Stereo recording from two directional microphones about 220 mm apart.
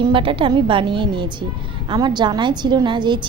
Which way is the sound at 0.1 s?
25° right (ahead or behind).